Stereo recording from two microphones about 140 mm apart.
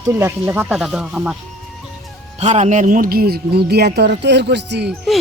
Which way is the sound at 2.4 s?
55° right (ahead or behind).